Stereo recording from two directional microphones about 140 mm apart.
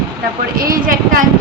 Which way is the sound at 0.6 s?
85° right.